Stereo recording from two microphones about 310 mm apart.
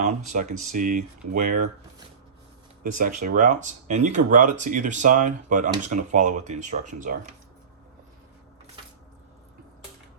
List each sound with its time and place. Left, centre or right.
0.0 s speech: right
0.5 s speech: right
0.8 s speech: right
2.8 s speech: right